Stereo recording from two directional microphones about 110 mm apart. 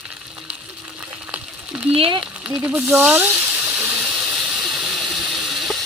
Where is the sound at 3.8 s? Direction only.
10° right (ahead or behind).